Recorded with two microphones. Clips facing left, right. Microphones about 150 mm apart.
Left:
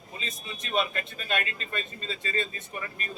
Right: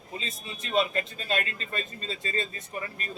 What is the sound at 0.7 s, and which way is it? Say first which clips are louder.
Speech: right 3 dB; 35° right (ahead or behind).